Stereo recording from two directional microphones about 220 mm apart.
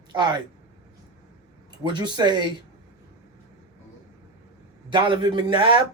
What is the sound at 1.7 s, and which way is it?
Speech, 20° right (ahead or behind).